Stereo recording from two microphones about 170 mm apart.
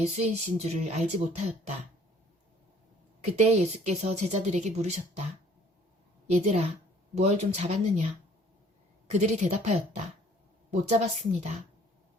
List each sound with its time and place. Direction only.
0.0 s speech: 40° right (ahead or behind)
3.3 s speech: 40° right (ahead or behind)
6.3 s speech: 45° right (ahead or behind)
9.0 s speech: 45° right (ahead or behind)